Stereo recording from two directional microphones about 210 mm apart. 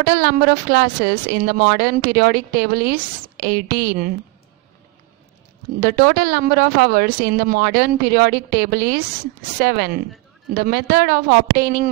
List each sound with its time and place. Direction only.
0.0 s a woman's voice: 50° right (ahead or behind)
5.8 s a woman's voice: 50° right (ahead or behind)